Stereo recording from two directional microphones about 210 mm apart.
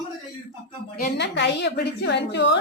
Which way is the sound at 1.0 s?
55° left (ahead or behind).